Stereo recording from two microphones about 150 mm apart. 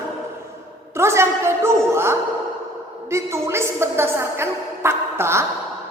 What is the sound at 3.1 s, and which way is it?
A woman's voice, 20° right (ahead or behind).